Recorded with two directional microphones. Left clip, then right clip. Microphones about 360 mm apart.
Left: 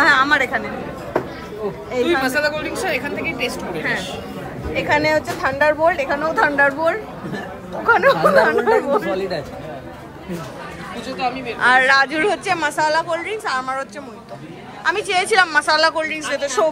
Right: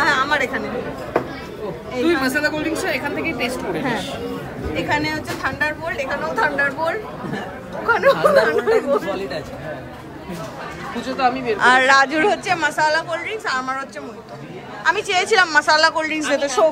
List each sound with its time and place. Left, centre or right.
0.0 s chatter: centre
1.9 s a woman's voice: centre
2.8 s speech: right
4.7 s a woman's voice: centre
11.0 s speech: right
11.6 s a woman's voice: centre